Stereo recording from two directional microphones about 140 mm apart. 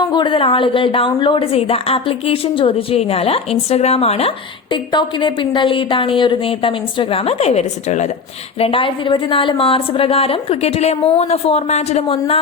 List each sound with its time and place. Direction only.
0.1 s a woman's voice: 35° left (ahead or behind); by 8.1 s 55° left (ahead or behind)
8.5 s a woman's voice: 40° left (ahead or behind)